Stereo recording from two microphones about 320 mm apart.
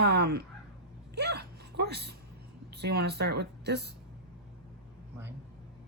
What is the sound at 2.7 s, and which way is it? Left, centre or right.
Speech, right.